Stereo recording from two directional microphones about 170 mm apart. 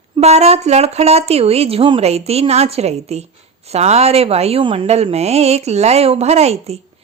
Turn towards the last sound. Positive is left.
turn(degrees=-40)  # may be behind; listen again after turning